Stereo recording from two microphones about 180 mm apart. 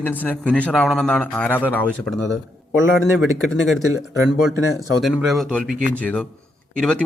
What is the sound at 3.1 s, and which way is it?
Speech, centre (ahead or behind).